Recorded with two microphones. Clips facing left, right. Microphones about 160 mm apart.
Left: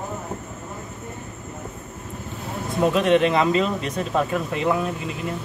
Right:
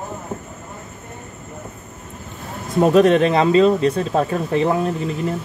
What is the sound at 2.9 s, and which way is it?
Speech, 40° right (ahead or behind).